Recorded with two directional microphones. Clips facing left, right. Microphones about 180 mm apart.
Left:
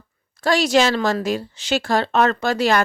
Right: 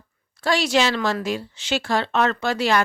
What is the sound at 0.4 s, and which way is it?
Speech, 40° left (ahead or behind).